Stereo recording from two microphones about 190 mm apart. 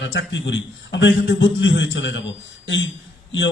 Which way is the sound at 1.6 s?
75° left (ahead or behind).